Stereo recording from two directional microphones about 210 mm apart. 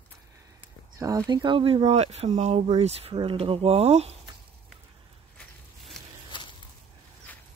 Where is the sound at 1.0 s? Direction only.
15° right (ahead or behind).